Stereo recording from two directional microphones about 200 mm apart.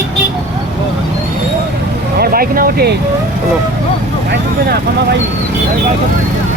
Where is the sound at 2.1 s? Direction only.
50° right (ahead or behind).